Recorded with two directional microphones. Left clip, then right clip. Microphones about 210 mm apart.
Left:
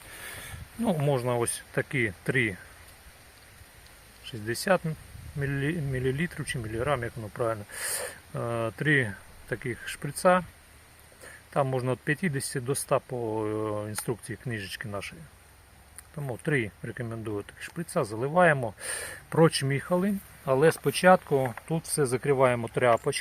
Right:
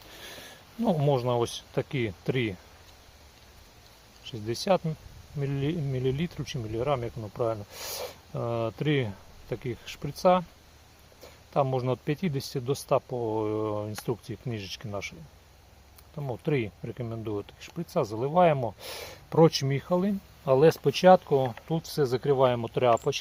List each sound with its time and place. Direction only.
0.1 s speech: 15° right (ahead or behind)
4.3 s speech: 5° right (ahead or behind)
7.2 s speech: 5° left (ahead or behind)
11.5 s speech: 5° right (ahead or behind)
16.1 s speech: centre (ahead or behind)